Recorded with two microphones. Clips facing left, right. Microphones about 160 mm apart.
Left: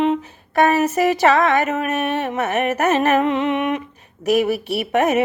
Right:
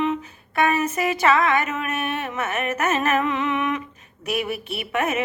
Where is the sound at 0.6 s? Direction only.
40° left (ahead or behind).